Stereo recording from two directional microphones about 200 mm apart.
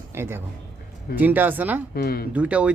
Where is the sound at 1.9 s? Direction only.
50° left (ahead or behind).